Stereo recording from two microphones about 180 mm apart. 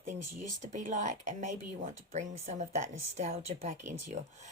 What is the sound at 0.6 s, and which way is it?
Speech, 45° right (ahead or behind).